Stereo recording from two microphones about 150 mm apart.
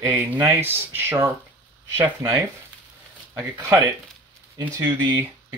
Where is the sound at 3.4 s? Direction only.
20° right (ahead or behind).